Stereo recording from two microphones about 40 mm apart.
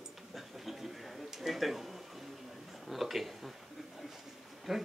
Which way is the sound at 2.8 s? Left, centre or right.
Centre.